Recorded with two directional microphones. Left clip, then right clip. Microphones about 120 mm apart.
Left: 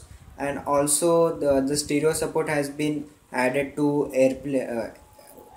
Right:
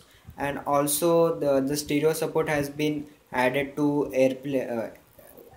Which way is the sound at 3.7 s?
5° right (ahead or behind).